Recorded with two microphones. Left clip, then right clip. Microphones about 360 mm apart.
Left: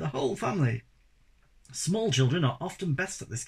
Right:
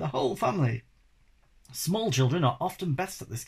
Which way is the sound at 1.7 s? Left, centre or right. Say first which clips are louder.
Left 1 dB; centre.